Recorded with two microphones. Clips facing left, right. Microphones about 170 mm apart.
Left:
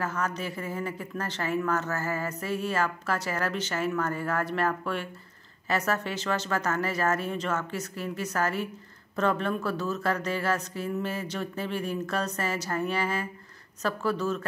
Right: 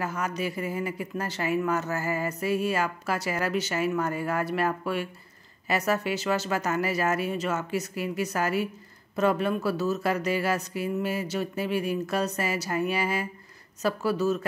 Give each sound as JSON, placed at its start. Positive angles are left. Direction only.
{"t": 0.0, "sound": "speech", "side_deg": -10}